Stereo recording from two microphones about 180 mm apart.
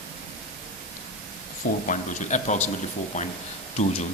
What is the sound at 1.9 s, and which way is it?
Speech, 40° left (ahead or behind).